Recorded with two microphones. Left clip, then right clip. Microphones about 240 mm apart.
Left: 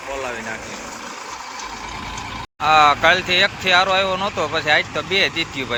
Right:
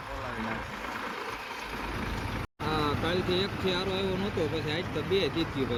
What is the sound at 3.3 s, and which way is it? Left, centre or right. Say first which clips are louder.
Speech: left 14 dB; centre.